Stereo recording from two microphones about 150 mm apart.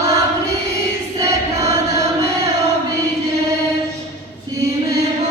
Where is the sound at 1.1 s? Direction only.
20° right (ahead or behind).